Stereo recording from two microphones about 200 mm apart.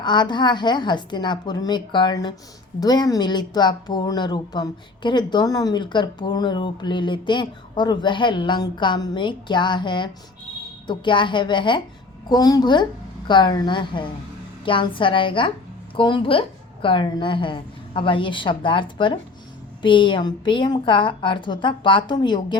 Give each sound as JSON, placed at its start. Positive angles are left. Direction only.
{"t": 0.0, "sound": "speech", "side_deg": 20}